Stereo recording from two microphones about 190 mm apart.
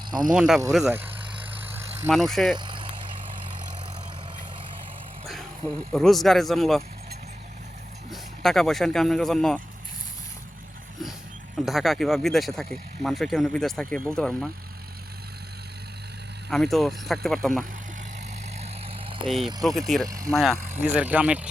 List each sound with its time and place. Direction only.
0.3 s speech: centre (ahead or behind)
2.6 s vehicle: 25° right (ahead or behind)
5.3 s speech: centre (ahead or behind)
8.1 s speech: centre (ahead or behind)
11.6 s speech: centre (ahead or behind)
16.5 s speech: centre (ahead or behind)
18.6 s vehicle: 30° right (ahead or behind)
19.6 s speech: centre (ahead or behind)